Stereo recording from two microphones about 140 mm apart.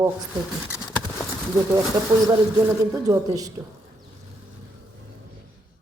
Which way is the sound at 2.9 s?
25° right (ahead or behind).